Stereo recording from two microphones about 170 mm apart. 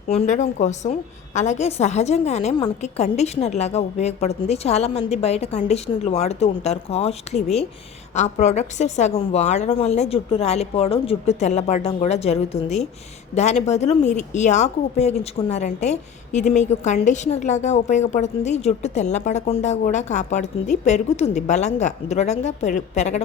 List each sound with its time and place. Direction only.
0.1 s a woman's voice: 40° left (ahead or behind)